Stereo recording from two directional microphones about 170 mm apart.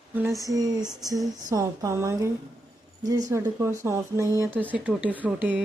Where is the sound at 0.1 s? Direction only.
10° right (ahead or behind).